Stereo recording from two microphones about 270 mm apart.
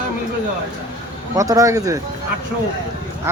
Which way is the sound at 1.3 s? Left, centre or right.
Centre.